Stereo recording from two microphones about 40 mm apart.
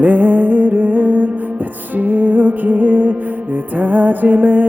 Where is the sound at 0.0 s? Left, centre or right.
Right.